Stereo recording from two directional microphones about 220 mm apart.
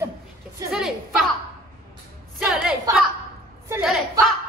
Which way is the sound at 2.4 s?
5° right (ahead or behind).